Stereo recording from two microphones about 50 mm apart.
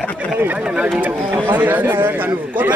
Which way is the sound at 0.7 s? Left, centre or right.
Right.